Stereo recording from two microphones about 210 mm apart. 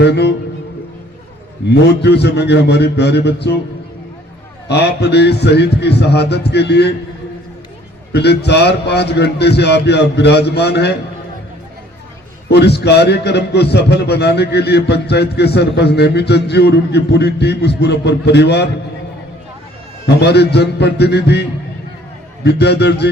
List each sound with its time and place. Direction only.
0.0 s a man's voice: 55° left (ahead or behind)
1.7 s a man's voice: 55° left (ahead or behind)
4.7 s a man's voice: 50° left (ahead or behind)
8.1 s a man's voice: 50° left (ahead or behind)
12.5 s a man's voice: 50° left (ahead or behind)
20.1 s a man's voice: 50° left (ahead or behind)
22.4 s a man's voice: 50° left (ahead or behind)